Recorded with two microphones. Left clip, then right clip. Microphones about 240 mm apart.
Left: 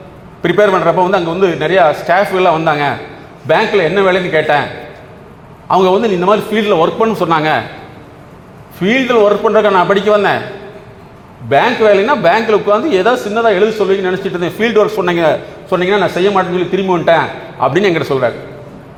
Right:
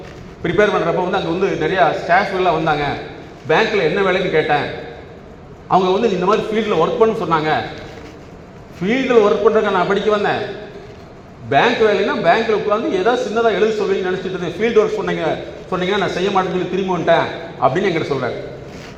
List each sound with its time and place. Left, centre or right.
0.4 s a man's voice: left
5.6 s a man's voice: left
8.8 s a man's voice: left
11.4 s a man's voice: left